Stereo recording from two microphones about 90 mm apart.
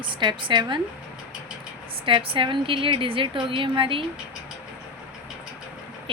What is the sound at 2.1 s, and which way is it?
A woman's voice, 75° right (ahead or behind).